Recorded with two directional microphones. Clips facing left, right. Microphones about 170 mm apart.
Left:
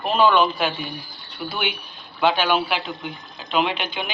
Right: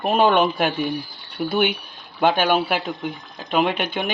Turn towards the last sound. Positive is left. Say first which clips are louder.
# right 4 dB
turn(degrees=-50)  # may be behind; listen again after turning